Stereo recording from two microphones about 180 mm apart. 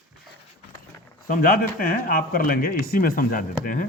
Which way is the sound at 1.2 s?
50° left (ahead or behind).